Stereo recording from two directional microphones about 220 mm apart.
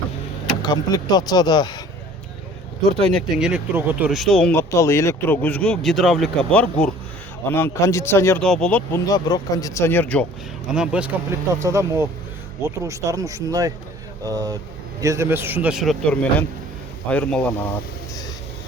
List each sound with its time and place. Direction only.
0.6 s speech: 20° left (ahead or behind)
3.1 s speech: centre (ahead or behind)
10.7 s a man's voice: 5° right (ahead or behind)